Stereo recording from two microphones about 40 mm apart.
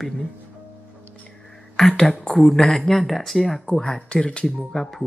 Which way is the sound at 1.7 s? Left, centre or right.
Centre.